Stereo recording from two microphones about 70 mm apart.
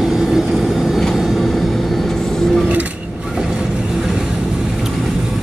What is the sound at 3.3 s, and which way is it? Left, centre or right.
Vehicle, centre.